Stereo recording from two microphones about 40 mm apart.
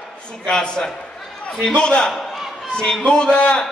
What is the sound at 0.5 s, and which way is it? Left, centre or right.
A man's voice, left.